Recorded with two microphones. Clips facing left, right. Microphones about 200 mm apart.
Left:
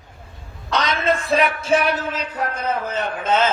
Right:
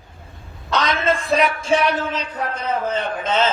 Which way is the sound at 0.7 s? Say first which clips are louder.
Right 1 dB; centre (ahead or behind).